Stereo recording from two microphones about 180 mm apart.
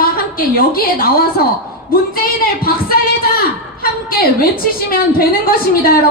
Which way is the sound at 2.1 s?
55° left (ahead or behind).